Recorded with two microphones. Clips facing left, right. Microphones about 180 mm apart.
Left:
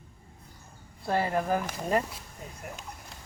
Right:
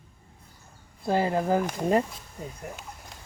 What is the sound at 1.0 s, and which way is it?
Speech, 20° right (ahead or behind).